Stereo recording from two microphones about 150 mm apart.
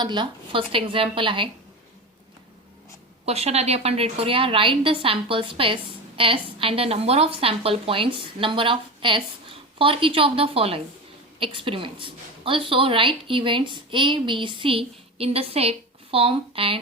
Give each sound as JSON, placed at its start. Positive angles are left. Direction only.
{"t": 0.0, "sound": "a woman's voice", "side_deg": -30}
{"t": 3.2, "sound": "a woman's voice", "side_deg": -45}